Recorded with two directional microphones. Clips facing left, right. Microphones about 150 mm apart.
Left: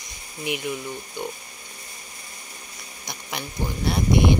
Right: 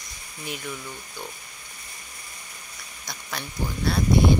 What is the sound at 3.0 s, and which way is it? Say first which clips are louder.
Speech: left 2 dB; 20° left (ahead or behind).